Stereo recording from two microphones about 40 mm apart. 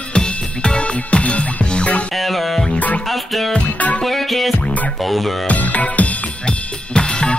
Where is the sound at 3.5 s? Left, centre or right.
Left.